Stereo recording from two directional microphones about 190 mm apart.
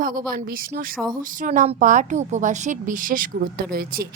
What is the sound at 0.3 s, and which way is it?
Speech, 50° right (ahead or behind).